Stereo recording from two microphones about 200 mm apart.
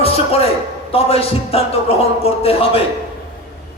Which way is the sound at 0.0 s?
30° left (ahead or behind).